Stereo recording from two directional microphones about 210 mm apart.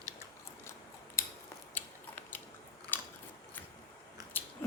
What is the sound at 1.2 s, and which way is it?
Scissors, 10° left (ahead or behind).